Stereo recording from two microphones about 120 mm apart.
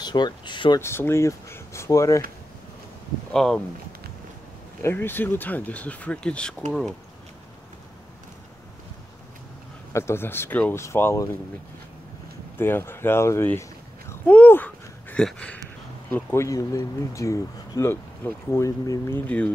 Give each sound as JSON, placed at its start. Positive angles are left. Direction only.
{"t": 0.0, "sound": "speech", "side_deg": 35}
{"t": 0.7, "sound": "speech", "side_deg": 20}
{"t": 3.3, "sound": "speech", "side_deg": 5}
{"t": 4.8, "sound": "speech", "side_deg": 15}
{"t": 9.9, "sound": "speech", "side_deg": 20}
{"t": 12.5, "sound": "speech", "side_deg": 20}
{"t": 14.3, "sound": "a sound", "side_deg": 15}
{"t": 15.2, "sound": "speech", "side_deg": 10}
{"t": 16.4, "sound": "speech", "side_deg": 30}
{"t": 19.2, "sound": "speech", "side_deg": 10}